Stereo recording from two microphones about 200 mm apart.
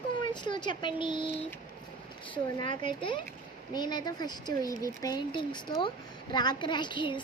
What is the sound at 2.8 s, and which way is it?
A woman's voice, 25° left (ahead or behind).